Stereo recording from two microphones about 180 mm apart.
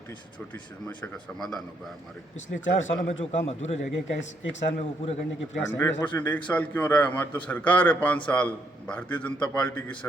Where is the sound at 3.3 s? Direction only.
35° left (ahead or behind).